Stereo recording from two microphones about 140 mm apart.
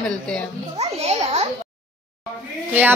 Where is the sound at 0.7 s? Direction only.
50° right (ahead or behind).